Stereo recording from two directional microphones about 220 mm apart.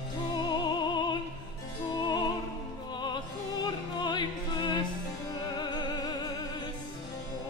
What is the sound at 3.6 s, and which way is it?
Music, 20° left (ahead or behind).